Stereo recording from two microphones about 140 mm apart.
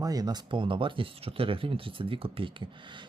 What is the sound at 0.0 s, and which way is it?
Speech, 25° right (ahead or behind).